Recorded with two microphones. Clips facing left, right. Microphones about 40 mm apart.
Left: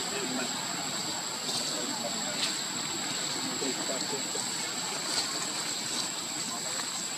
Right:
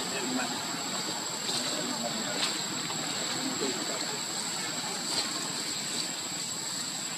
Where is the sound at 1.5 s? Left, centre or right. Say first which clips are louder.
Right 2 dB; right.